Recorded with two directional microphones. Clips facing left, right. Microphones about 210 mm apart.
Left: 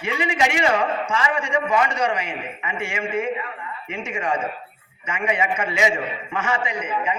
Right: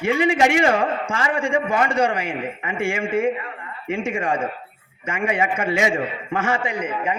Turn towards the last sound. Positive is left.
turn(degrees=-55)  # may be behind; listen again after turning